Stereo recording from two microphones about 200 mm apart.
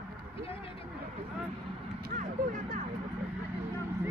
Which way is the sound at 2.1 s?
40° right (ahead or behind).